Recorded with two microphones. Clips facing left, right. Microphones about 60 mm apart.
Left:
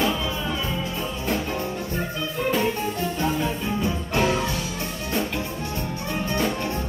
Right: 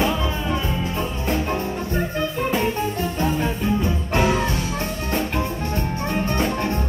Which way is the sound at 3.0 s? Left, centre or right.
Right.